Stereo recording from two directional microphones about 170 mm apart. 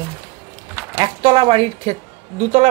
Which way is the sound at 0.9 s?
30° right (ahead or behind).